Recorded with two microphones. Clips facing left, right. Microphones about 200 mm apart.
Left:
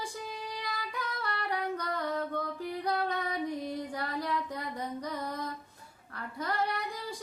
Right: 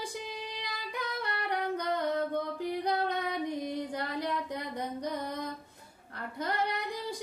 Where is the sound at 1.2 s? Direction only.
20° right (ahead or behind).